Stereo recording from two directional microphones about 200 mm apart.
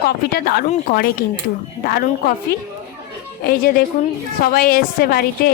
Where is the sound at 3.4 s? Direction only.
50° left (ahead or behind).